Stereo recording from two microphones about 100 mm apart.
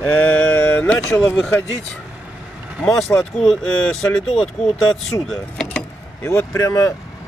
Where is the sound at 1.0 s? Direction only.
35° left (ahead or behind).